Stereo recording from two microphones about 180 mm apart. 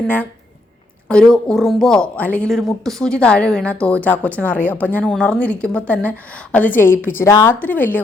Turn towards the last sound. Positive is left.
turn(degrees=10)  # may be behind; listen again after turning